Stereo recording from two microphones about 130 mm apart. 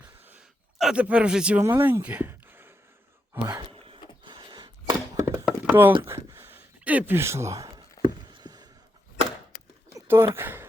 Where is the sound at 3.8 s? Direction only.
40° right (ahead or behind).